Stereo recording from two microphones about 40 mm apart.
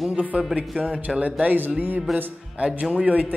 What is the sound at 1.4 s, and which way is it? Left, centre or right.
Speech, right.